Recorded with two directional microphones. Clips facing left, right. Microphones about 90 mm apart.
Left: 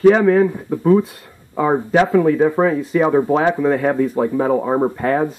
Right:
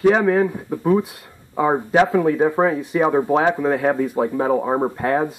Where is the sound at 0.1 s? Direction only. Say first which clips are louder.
Left 3 dB; 15° right (ahead or behind).